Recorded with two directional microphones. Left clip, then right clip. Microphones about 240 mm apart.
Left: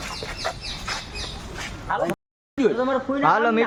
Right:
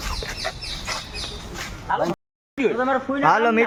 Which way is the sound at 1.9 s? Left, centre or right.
Centre.